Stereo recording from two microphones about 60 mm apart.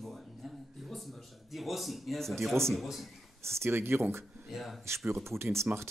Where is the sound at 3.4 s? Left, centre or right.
Right.